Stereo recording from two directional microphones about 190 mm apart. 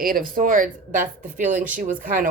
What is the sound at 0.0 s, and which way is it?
Speech, 45° right (ahead or behind).